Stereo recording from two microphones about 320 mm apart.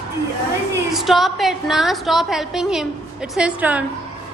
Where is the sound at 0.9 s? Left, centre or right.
Centre.